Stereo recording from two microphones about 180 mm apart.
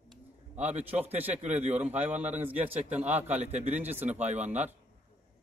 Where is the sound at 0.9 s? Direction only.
10° right (ahead or behind).